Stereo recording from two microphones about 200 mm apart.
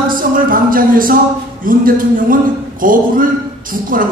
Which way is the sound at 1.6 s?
45° right (ahead or behind).